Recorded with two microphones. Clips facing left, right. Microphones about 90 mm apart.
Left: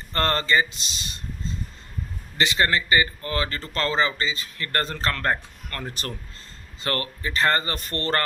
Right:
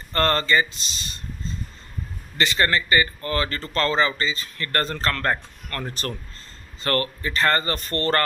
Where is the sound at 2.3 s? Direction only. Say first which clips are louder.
Right 1 dB; 15° left (ahead or behind).